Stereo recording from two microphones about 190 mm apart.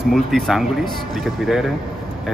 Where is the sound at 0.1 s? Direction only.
Centre (ahead or behind).